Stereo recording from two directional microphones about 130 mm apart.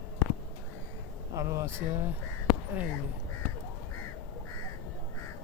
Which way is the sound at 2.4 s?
10° right (ahead or behind).